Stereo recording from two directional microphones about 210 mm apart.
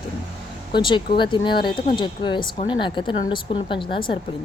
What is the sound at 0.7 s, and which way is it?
A woman's voice, 20° left (ahead or behind).